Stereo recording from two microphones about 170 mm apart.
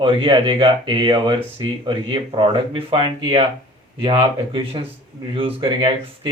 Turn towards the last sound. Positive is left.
turn(degrees=-30)  # may be behind; listen again after turning